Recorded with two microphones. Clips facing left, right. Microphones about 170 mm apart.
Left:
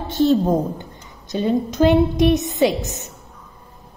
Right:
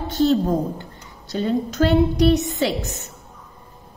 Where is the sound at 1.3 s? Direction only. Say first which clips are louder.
Left 2 dB; 15° left (ahead or behind).